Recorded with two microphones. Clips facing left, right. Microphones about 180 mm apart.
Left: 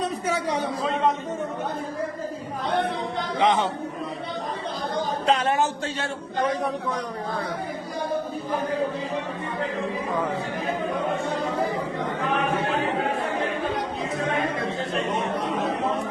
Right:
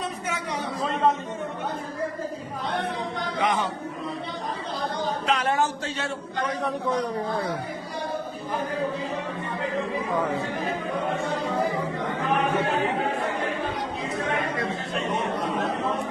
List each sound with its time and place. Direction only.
0.8 s a sound: centre (ahead or behind)
3.4 s speech: 25° left (ahead or behind)
5.2 s speech: 25° left (ahead or behind)